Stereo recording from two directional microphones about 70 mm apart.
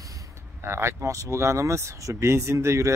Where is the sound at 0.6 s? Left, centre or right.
Right.